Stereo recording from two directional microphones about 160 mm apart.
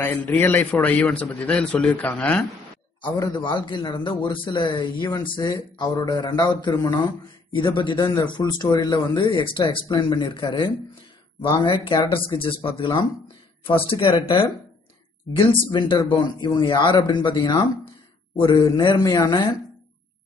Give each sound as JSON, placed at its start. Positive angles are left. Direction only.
{"t": 0.0, "sound": "a man's voice", "side_deg": 10}
{"t": 3.0, "sound": "a man's voice", "side_deg": 30}
{"t": 15.3, "sound": "a man's voice", "side_deg": 30}